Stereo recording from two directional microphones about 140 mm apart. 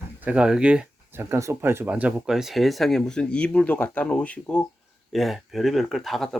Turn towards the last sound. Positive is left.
turn(degrees=0)  # may be behind; listen again after turning